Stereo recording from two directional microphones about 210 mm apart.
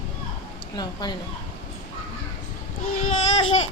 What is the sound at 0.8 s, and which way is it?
Speech, 20° left (ahead or behind).